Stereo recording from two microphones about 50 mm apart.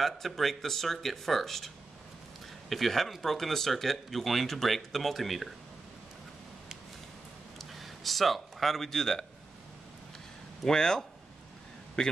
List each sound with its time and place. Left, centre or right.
0.0 s speech: centre
2.7 s speech: centre
7.5 s a sound: centre
10.6 s speech: centre